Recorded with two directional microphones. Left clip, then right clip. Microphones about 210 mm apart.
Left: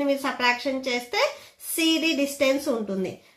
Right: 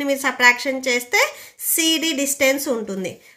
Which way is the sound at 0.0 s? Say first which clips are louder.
Right 7 dB; 45° right (ahead or behind).